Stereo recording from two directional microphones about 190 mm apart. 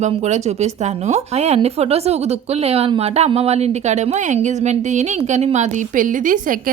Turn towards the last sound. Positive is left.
turn(degrees=-45)  # may be behind; listen again after turning